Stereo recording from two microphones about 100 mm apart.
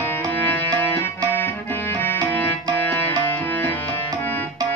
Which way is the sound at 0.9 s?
20° left (ahead or behind).